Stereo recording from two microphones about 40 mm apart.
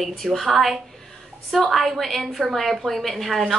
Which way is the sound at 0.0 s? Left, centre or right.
Centre.